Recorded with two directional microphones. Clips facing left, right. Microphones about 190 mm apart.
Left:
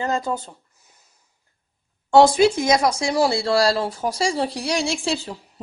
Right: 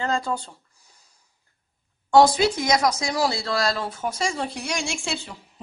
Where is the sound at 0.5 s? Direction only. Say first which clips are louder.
Left 3 dB; 20° left (ahead or behind).